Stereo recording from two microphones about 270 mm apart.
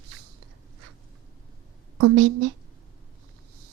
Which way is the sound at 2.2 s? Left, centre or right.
Right.